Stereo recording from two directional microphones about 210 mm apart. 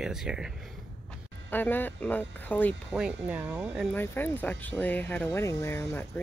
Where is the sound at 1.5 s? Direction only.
10° left (ahead or behind).